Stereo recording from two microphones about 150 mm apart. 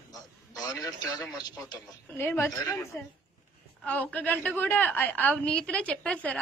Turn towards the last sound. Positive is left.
turn(degrees=10)  # may be behind; listen again after turning